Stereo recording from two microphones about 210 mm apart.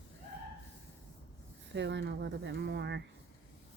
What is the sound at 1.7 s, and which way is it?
Speech, 55° right (ahead or behind).